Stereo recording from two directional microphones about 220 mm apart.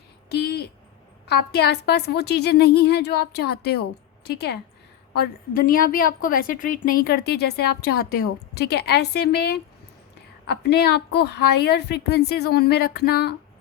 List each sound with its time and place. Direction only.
0.3 s a sound: 50° left (ahead or behind)
1.3 s a woman's voice: 50° left (ahead or behind)
10.6 s a woman's voice: 50° left (ahead or behind)